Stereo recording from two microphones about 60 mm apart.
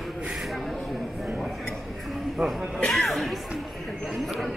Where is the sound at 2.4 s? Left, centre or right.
Centre.